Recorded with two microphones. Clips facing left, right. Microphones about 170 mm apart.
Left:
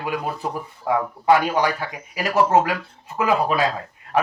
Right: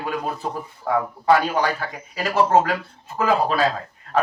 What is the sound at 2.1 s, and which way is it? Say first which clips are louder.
Speech: even; 15° left (ahead or behind).